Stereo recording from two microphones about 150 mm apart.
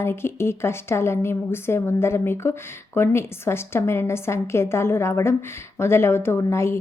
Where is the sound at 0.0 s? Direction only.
15° left (ahead or behind).